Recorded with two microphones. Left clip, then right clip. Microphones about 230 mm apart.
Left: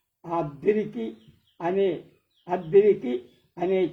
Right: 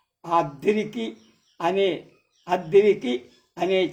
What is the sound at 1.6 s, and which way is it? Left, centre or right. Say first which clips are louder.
A man's voice: right 2 dB; right.